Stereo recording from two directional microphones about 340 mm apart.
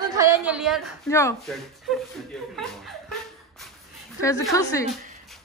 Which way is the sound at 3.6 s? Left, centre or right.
Centre.